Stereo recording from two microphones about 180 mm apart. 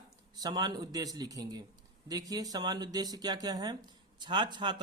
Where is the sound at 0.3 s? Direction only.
20° right (ahead or behind).